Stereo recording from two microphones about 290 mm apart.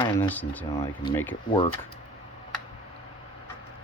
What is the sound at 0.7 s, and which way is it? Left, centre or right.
Speech, left.